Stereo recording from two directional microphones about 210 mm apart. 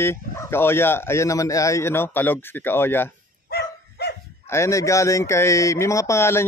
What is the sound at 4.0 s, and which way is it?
Bow-wow, 50° left (ahead or behind).